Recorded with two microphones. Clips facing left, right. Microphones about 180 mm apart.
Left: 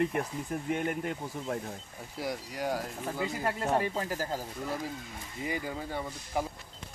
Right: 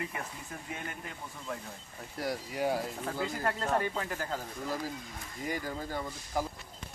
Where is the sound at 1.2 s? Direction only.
35° left (ahead or behind).